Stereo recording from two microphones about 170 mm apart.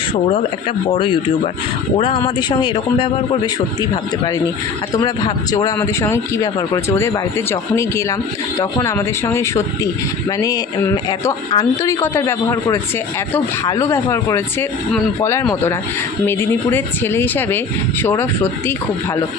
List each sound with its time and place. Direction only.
2.0 s speech: 30° left (ahead or behind)
5.0 s speech: 20° left (ahead or behind)